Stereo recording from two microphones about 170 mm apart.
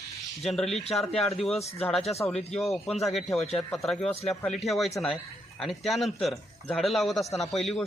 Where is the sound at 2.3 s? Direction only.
5° left (ahead or behind).